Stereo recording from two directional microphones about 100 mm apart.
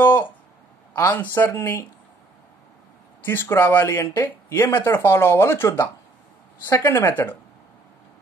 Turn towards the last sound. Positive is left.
turn(degrees=25)  # may be behind; listen again after turning